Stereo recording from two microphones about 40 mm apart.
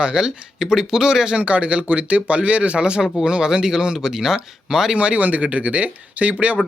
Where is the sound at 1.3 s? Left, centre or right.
Right; by 4.9 s centre.